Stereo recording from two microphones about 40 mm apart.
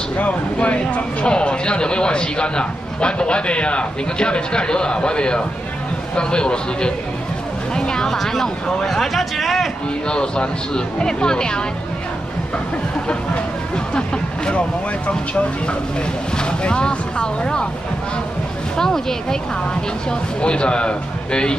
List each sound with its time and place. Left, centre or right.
0.6 s speech: left; by 9.7 s centre
10.0 s speech: left
13.9 s vehicle: left
16.3 s speech: left
18.8 s speech: centre
19.7 s speech: left